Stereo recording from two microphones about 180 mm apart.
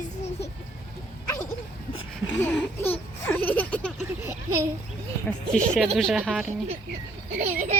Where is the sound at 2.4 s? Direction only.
10° left (ahead or behind).